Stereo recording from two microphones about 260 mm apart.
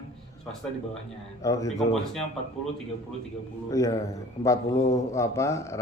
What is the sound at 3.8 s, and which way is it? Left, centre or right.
A man's voice, centre.